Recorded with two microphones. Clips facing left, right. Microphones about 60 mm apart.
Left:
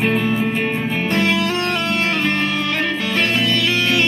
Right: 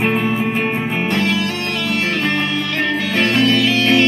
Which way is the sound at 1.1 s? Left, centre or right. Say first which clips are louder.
Left 1 dB; left.